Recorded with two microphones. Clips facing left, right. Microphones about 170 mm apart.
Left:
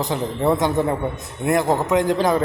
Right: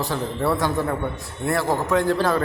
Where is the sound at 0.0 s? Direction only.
20° left (ahead or behind).